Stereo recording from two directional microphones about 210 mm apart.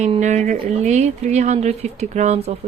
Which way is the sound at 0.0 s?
35° right (ahead or behind).